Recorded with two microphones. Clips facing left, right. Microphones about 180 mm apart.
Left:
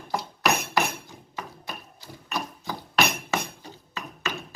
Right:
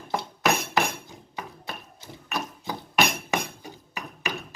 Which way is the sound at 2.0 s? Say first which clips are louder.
Even; 20° right (ahead or behind).